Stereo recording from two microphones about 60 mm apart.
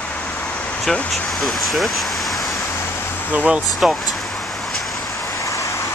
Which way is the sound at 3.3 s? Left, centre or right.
Right.